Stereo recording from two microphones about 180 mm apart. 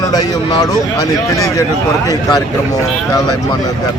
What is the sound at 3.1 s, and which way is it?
Speech, 20° left (ahead or behind).